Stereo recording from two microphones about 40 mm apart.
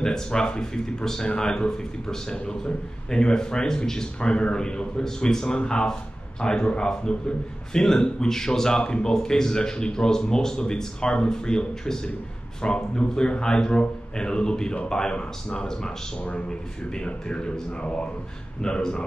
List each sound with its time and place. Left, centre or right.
0.0 s a man's voice: centre
16.2 s a man's voice: left